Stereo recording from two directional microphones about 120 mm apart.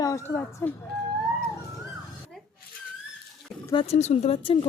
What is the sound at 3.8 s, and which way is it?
Speech, 65° left (ahead or behind).